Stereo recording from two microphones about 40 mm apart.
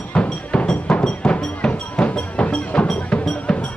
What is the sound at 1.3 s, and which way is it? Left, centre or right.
Music, left.